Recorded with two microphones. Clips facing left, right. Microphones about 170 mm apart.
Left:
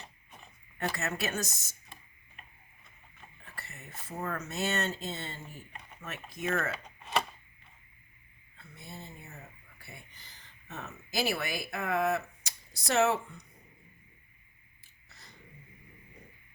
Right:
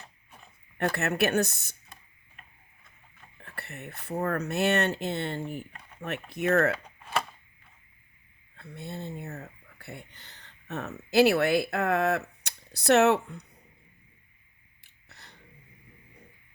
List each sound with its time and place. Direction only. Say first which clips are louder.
0.8 s speech: right 7 dB; 60° right (ahead or behind)
3.4 s a sound: right 8 dB; 65° right (ahead or behind)
4.2 s speech: right 7 dB; 65° right (ahead or behind)
7.0 s typewriter: left 1 dB; 5° right (ahead or behind)
8.5 s speech: right 9 dB; 65° right (ahead or behind)
15.1 s a sound: right 3 dB; 65° right (ahead or behind)